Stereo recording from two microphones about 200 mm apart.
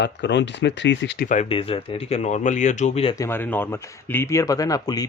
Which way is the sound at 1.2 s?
35° left (ahead or behind).